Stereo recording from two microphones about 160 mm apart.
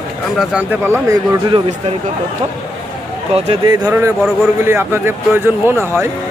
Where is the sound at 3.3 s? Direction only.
35° right (ahead or behind).